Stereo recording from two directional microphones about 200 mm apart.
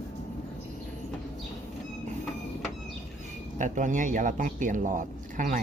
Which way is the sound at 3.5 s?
40° right (ahead or behind).